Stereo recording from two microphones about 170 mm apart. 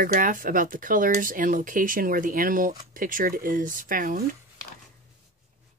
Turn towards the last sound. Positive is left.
turn(degrees=-55)  # may be behind; listen again after turning